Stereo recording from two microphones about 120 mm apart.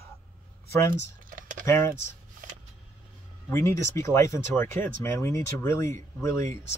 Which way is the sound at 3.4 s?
25° left (ahead or behind).